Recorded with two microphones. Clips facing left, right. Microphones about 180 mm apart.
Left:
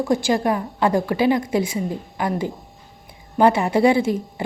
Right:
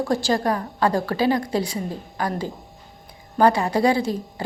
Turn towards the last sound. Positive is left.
turn(degrees=20)  # may be behind; listen again after turning